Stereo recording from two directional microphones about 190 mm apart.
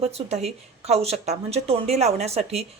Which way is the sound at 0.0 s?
35° right (ahead or behind).